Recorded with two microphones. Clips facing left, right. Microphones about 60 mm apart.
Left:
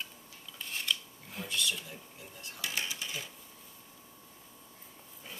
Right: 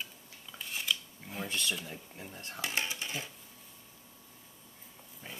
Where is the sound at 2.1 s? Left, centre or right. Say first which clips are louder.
Right 4 dB; right.